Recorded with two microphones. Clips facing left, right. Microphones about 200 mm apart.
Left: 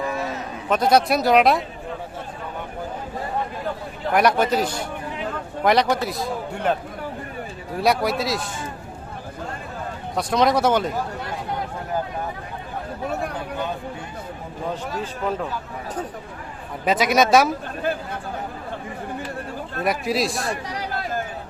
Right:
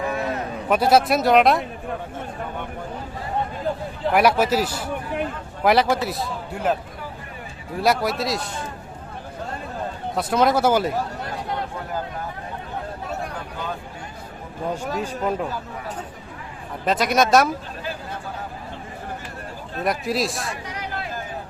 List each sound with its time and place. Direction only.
0.2 s a sound: 55° right (ahead or behind)
0.7 s a man's voice: 5° right (ahead or behind)
4.1 s a man's voice: 5° right (ahead or behind)
7.8 s a man's voice: centre (ahead or behind)
10.2 s a man's voice: 5° right (ahead or behind)
14.7 s speech: 10° right (ahead or behind)
16.8 s a man's voice: centre (ahead or behind)
19.8 s a man's voice: centre (ahead or behind)
20.5 s a sound: 35° left (ahead or behind)